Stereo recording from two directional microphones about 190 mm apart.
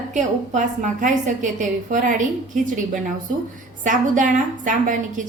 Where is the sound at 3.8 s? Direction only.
40° right (ahead or behind).